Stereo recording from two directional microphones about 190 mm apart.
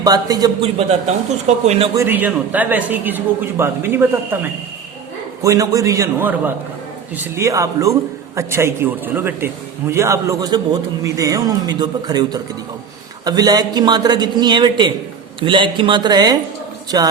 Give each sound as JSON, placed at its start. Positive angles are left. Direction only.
{"t": 0.0, "sound": "a man's voice", "side_deg": -20}
{"t": 0.6, "sound": "speech", "side_deg": -30}
{"t": 2.0, "sound": "a man's voice", "side_deg": -10}
{"t": 5.4, "sound": "a man's voice", "side_deg": -15}